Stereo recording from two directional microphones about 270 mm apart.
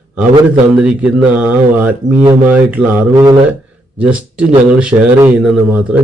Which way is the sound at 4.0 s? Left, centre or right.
Centre.